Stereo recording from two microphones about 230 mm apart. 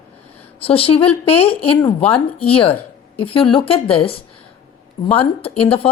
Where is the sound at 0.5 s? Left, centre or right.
Left.